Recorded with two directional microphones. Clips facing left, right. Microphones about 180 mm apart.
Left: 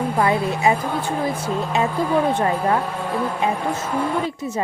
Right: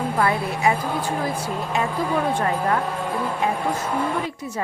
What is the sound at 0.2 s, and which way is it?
Speech, 20° left (ahead or behind).